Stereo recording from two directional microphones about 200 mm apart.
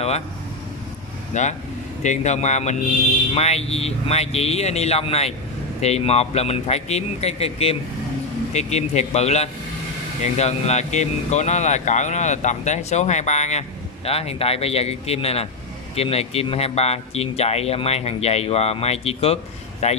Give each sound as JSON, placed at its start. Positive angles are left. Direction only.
{"t": 1.3, "sound": "speech", "side_deg": 35}